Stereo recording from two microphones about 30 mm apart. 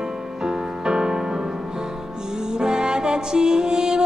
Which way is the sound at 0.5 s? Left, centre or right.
Right.